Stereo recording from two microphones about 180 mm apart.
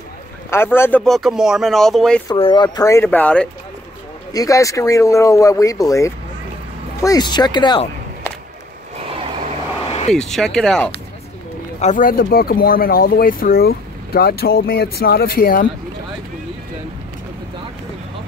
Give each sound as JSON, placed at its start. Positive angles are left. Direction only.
{"t": 0.5, "sound": "speech", "side_deg": 15}
{"t": 1.0, "sound": "speech", "side_deg": 0}
{"t": 2.3, "sound": "speech", "side_deg": 30}
{"t": 4.3, "sound": "speech", "side_deg": 20}
{"t": 9.8, "sound": "vehicle", "side_deg": 35}
{"t": 10.1, "sound": "speech", "side_deg": 0}
{"t": 11.8, "sound": "speech", "side_deg": 45}